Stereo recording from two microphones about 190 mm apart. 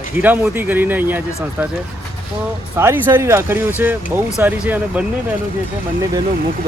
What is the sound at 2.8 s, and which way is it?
Speech, 10° right (ahead or behind).